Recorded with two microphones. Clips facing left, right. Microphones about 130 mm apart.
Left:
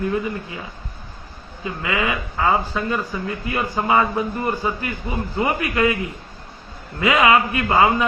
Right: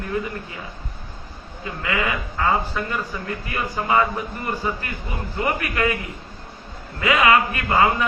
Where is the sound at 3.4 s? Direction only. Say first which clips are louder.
Left 3 dB; 25° left (ahead or behind).